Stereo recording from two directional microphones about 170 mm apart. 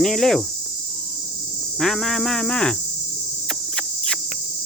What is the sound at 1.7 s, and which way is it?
Speech, centre (ahead or behind).